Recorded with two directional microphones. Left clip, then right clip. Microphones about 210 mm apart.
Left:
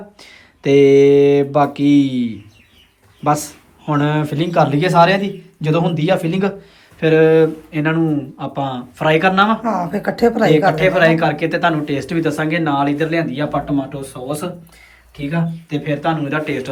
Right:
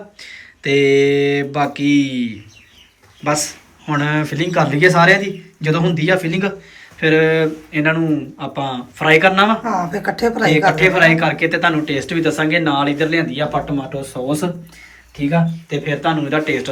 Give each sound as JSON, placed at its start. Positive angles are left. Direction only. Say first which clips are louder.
{"t": 0.3, "sound": "a man's voice", "louder": "left 3 dB", "side_deg": 15}
{"t": 3.8, "sound": "a man's voice", "louder": "left 1 dB", "side_deg": 10}
{"t": 10.2, "sound": "speech", "louder": "left 4 dB", "side_deg": 45}
{"t": 10.7, "sound": "speech", "louder": "right 1 dB", "side_deg": 0}
{"t": 15.7, "sound": "speech", "louder": "right 1 dB", "side_deg": 0}